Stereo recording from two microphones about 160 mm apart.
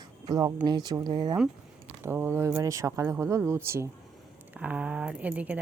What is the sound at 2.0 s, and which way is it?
Speech, 15° right (ahead or behind).